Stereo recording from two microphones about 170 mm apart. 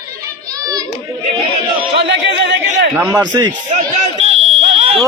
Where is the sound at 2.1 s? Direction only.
90° right.